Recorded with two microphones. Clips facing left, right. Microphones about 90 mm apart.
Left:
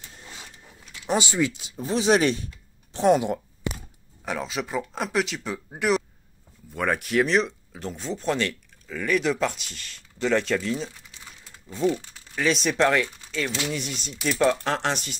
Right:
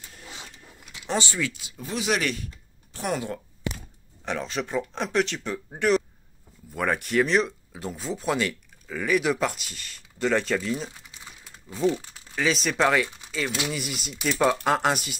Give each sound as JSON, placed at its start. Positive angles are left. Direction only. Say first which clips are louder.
{"t": 1.0, "sound": "speech", "louder": "left 4 dB", "side_deg": 15}
{"t": 4.2, "sound": "speech", "louder": "even", "side_deg": 5}
{"t": 11.9, "sound": "speech", "louder": "left 1 dB", "side_deg": 0}